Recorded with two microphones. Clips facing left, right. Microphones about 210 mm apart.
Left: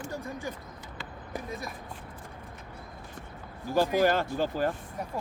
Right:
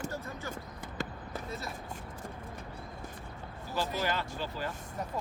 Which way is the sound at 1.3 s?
15° left (ahead or behind).